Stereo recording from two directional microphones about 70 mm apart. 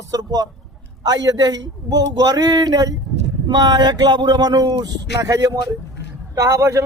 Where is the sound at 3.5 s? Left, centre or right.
Right.